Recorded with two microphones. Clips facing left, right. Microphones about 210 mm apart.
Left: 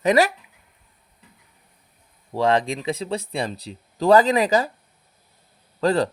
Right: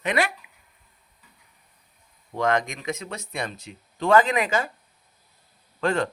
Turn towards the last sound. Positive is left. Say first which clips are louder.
# left 4 dB
turn(degrees=35)  # may be behind; listen again after turning